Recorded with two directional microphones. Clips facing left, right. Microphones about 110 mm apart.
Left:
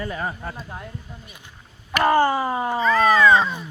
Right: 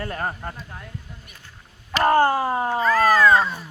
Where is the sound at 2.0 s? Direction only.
55° right (ahead or behind).